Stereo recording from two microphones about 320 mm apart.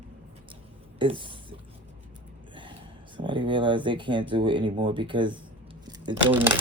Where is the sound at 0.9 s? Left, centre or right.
Centre.